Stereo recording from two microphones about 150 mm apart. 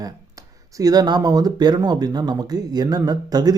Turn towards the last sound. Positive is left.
turn(degrees=-25)  # may be behind; listen again after turning